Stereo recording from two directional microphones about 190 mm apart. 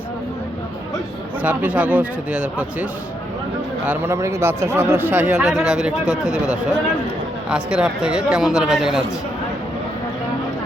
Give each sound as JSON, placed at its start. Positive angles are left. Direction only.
{"t": 1.4, "sound": "speech", "side_deg": -5}
{"t": 3.8, "sound": "speech", "side_deg": -15}